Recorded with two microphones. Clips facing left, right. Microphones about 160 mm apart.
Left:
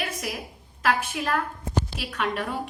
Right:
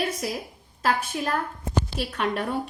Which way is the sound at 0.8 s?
35° right (ahead or behind).